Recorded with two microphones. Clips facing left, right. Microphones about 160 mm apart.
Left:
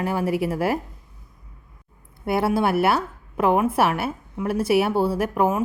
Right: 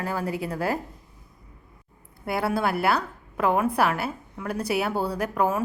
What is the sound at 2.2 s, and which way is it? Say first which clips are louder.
A woman's voice: left 4 dB; 25° left (ahead or behind).